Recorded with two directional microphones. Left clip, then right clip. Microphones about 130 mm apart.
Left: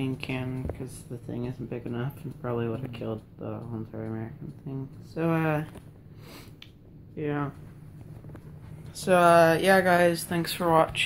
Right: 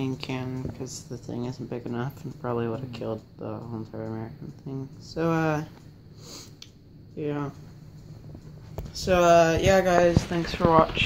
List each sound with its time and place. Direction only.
0.0 s speech: 5° right (ahead or behind)
7.2 s speech: 5° left (ahead or behind)
8.9 s speech: 10° left (ahead or behind)
10.0 s speech: 25° left (ahead or behind)